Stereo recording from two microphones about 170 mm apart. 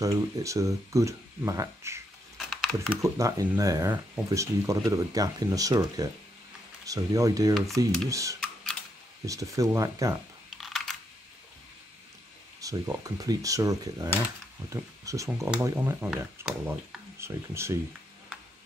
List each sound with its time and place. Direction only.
0.0 s speech: 20° right (ahead or behind)
2.3 s a sound: centre (ahead or behind)
3.0 s speech: 20° right (ahead or behind)
12.5 s speech: 20° right (ahead or behind)